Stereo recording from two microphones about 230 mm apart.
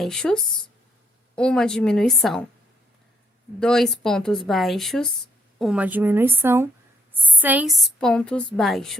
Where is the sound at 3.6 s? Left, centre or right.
Centre.